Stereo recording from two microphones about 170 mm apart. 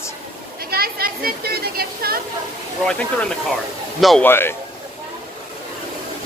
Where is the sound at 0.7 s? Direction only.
65° right (ahead or behind).